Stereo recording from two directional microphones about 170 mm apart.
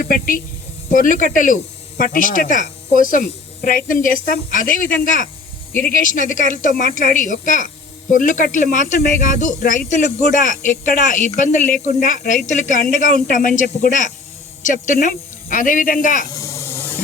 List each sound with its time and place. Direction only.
0.0 s speech: 55° left (ahead or behind)
16.3 s snake: 20° left (ahead or behind)